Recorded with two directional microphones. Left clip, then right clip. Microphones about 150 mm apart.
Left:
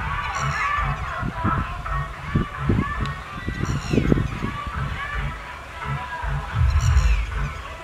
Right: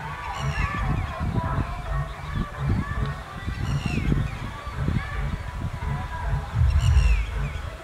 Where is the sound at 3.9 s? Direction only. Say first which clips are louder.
Left 12 dB; 90° left.